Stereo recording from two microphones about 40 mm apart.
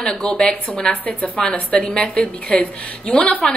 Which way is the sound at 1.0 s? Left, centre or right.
Left.